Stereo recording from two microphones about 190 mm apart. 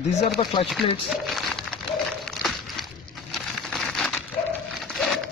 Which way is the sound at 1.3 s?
Centre (ahead or behind).